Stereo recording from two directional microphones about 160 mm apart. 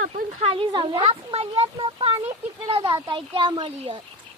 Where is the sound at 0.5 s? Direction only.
30° right (ahead or behind).